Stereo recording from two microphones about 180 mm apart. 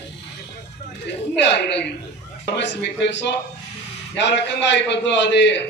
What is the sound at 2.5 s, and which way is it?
A man's voice, 75° left (ahead or behind).